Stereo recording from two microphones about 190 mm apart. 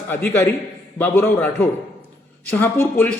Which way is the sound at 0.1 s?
10° left (ahead or behind).